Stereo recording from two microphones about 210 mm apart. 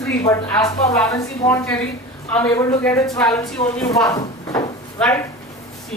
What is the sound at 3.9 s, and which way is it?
Speech, 15° left (ahead or behind).